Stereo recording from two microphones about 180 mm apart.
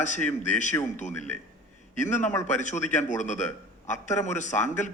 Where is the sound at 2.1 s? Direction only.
40° left (ahead or behind).